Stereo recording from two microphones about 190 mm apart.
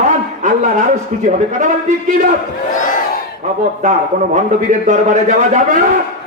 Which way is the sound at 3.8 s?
40° right (ahead or behind).